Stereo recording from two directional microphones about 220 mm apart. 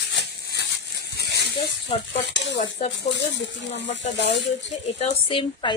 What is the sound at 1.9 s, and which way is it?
Speech, 25° left (ahead or behind).